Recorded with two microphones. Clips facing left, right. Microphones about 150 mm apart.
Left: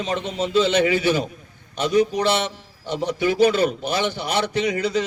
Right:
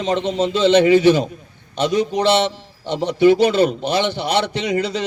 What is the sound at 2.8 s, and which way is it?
A man's voice, 25° right (ahead or behind).